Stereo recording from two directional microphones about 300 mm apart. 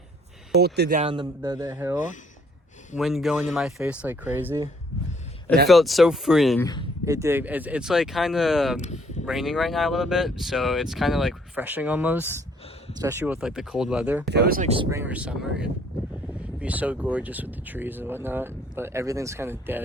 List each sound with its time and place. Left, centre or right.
0.6 s speech: right; by 2.0 s centre
3.0 s speech: centre
8.8 s speech: left
9.2 s speech: centre
14.3 s speech: right; by 19.8 s centre